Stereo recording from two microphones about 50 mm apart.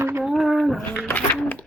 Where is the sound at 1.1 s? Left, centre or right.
Left.